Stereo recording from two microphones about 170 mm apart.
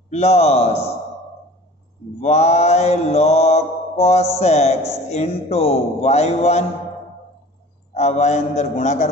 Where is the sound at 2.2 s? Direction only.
40° left (ahead or behind).